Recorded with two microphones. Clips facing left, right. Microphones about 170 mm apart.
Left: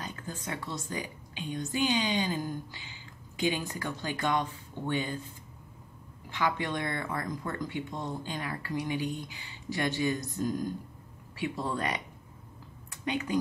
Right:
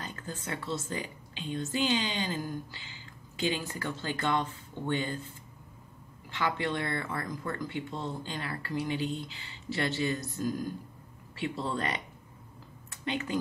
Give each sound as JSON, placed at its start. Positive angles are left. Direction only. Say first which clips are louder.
{"t": 0.0, "sound": "speech", "louder": "left 1 dB", "side_deg": 10}
{"t": 6.3, "sound": "speech", "louder": "even", "side_deg": 15}
{"t": 13.0, "sound": "speech", "louder": "left 2 dB", "side_deg": 15}